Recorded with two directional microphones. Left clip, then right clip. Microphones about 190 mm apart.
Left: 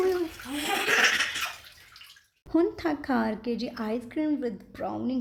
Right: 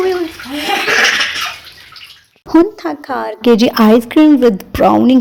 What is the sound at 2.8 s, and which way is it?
A woman's voice, 25° right (ahead or behind).